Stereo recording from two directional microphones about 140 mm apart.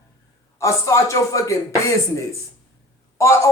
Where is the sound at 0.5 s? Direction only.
20° left (ahead or behind).